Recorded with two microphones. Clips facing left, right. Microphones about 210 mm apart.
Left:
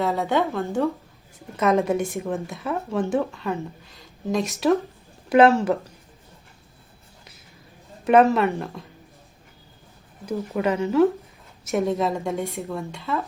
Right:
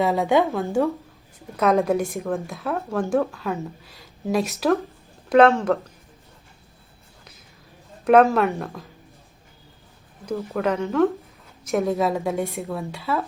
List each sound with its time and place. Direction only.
0.0 s a woman's voice: 15° right (ahead or behind)
1.5 s speech: centre (ahead or behind)
8.0 s speech: centre (ahead or behind)
10.2 s speech: 15° left (ahead or behind)
10.6 s speech: 5° left (ahead or behind)